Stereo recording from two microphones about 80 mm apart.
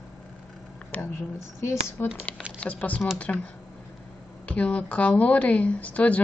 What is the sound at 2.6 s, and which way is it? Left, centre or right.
Speech, centre.